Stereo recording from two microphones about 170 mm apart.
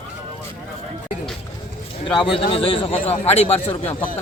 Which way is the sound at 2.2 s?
30° left (ahead or behind).